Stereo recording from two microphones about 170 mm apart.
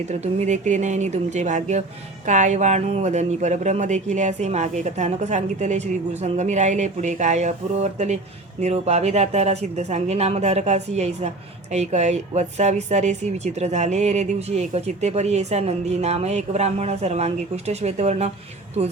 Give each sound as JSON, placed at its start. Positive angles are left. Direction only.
{"t": 0.1, "sound": "speech", "side_deg": -45}